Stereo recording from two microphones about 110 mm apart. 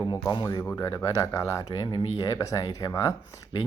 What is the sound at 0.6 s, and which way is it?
Speech, 25° left (ahead or behind).